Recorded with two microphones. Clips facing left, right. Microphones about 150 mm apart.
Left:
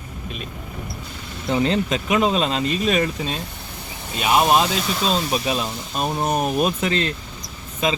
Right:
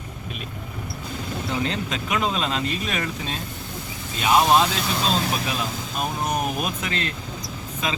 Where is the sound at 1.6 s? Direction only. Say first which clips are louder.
Left 6 dB; 20° left (ahead or behind).